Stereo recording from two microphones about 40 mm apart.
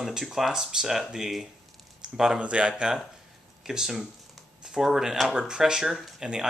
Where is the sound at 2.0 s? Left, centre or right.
Right.